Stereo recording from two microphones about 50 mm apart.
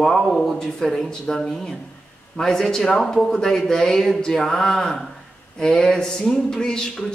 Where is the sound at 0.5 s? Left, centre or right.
Centre.